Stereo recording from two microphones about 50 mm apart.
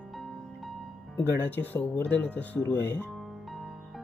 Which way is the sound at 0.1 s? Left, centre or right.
Centre.